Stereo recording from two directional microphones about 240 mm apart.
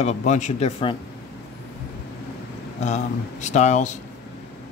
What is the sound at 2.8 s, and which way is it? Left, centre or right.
Speech, left.